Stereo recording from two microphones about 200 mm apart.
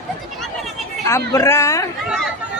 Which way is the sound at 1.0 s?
15° left (ahead or behind).